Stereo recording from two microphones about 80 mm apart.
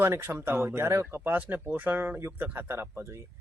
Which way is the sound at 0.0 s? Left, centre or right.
Right.